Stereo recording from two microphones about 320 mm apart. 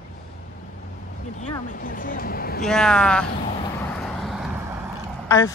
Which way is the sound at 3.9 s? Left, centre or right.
Centre.